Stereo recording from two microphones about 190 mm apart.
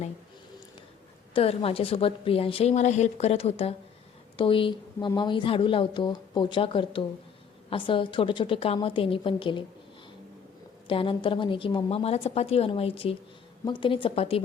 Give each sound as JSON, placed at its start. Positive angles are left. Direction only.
{"t": 1.3, "sound": "a woman's voice", "side_deg": 30}
{"t": 10.8, "sound": "speech", "side_deg": 25}